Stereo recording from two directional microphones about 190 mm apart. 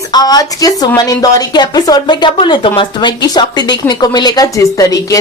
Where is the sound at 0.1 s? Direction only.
20° left (ahead or behind).